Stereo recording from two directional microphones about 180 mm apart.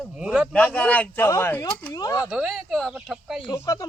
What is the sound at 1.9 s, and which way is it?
Speech, 20° left (ahead or behind).